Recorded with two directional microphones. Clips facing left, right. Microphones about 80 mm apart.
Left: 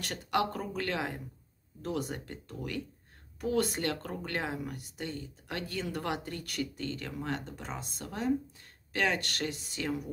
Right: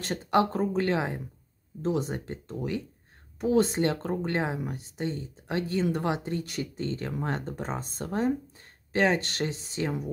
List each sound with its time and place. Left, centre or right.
0.0 s speech: right